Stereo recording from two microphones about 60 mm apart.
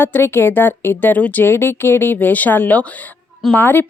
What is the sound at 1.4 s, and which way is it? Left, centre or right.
Speech, left.